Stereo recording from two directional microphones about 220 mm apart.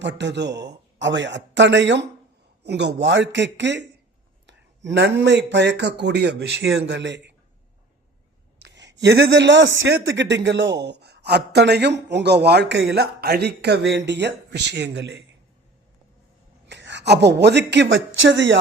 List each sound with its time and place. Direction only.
0.0 s a man's voice: 55° right (ahead or behind)
8.6 s a sound: 55° right (ahead or behind)
9.3 s a man's voice: 55° right (ahead or behind)
16.6 s speech: 55° right (ahead or behind)